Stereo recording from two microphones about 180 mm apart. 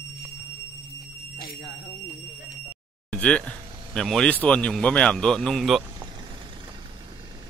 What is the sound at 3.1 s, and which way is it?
Speech, 5° left (ahead or behind).